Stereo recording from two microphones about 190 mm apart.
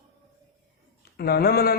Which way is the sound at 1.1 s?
55° left (ahead or behind).